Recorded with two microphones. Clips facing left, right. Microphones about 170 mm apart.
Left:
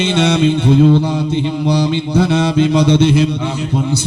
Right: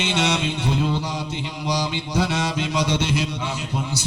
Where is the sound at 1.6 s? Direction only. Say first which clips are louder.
Left 6 dB; 60° left (ahead or behind).